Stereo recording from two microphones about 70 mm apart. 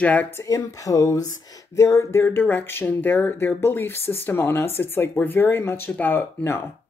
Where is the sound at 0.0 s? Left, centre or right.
Left.